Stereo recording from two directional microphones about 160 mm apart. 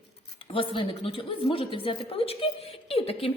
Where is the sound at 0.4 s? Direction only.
35° left (ahead or behind).